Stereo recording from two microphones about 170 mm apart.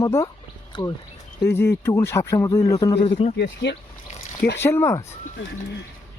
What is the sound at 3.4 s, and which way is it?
Speech, 90° left.